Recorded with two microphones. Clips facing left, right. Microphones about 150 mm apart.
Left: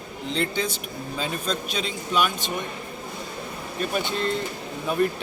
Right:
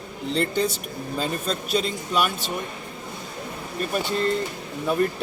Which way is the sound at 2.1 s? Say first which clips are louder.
Left 1 dB; 5° right (ahead or behind).